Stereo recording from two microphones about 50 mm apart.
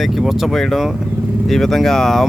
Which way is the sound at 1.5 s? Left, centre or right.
Centre.